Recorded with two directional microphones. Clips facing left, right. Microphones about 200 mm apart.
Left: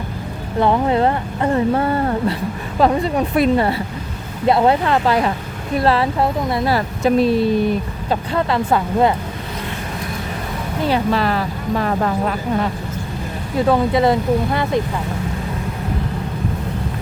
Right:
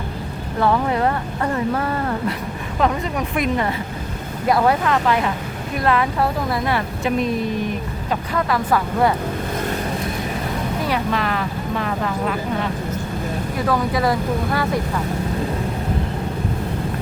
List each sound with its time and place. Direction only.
0.6 s speech: 25° left (ahead or behind)
10.8 s speech: 30° left (ahead or behind)
13.7 s speech: 25° left (ahead or behind)